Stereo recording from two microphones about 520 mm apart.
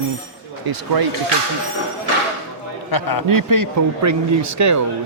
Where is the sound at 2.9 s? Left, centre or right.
Left.